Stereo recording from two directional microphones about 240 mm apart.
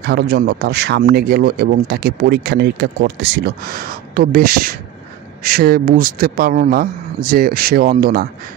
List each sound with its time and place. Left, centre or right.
0.0 s speech: right